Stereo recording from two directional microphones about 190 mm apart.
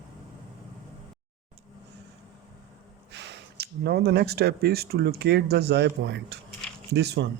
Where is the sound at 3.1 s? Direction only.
65° right (ahead or behind).